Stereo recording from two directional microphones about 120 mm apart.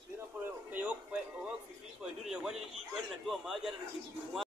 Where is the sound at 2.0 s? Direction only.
5° right (ahead or behind).